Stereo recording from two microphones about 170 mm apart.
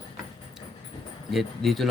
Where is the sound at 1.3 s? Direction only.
Centre (ahead or behind).